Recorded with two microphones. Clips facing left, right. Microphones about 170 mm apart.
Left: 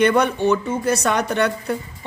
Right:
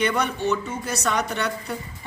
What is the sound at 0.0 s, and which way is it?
Speech, 55° left (ahead or behind).